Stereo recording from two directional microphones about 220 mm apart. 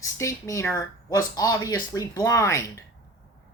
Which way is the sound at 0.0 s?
15° left (ahead or behind).